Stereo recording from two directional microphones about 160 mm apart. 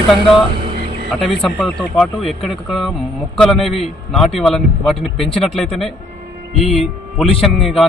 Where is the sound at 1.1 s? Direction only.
Centre (ahead or behind).